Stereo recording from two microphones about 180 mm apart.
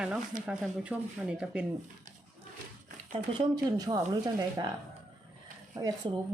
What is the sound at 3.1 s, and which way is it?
Speech, 25° right (ahead or behind).